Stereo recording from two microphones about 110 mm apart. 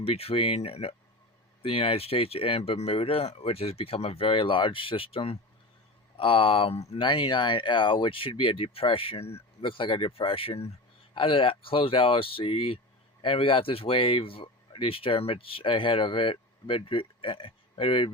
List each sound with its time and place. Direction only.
0.0 s speech: 60° left (ahead or behind)